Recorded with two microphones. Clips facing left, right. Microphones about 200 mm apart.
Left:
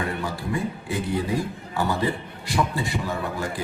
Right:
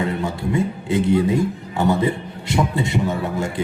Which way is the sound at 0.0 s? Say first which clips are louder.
Right 6 dB; 25° right (ahead or behind).